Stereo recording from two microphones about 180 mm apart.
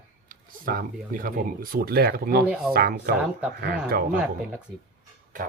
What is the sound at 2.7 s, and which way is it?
Speech, 60° right (ahead or behind).